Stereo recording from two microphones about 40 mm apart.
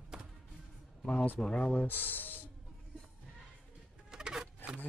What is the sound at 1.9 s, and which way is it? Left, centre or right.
Speech, left.